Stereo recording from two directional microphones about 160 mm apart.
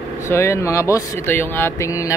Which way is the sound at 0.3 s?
15° left (ahead or behind).